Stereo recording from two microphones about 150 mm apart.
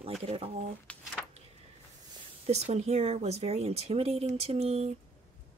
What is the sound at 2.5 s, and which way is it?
A woman's voice, 50° right (ahead or behind).